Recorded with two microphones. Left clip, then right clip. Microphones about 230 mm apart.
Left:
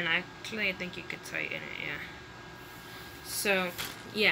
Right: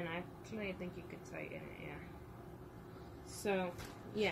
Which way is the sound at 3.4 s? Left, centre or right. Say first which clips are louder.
Left 9 dB; centre.